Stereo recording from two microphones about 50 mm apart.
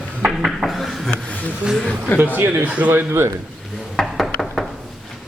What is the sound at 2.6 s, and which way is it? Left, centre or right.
Speech, right.